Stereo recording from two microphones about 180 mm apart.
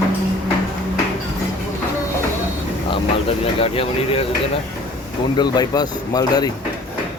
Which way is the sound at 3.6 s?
30° left (ahead or behind).